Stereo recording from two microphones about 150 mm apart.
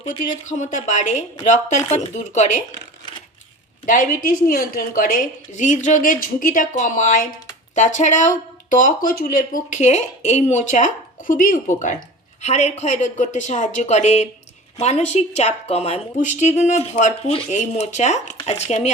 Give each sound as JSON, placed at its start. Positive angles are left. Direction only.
{"t": 0.4, "sound": "a woman's voice", "side_deg": 55}
{"t": 3.8, "sound": "a woman's voice", "side_deg": 65}
{"t": 12.4, "sound": "speech", "side_deg": 45}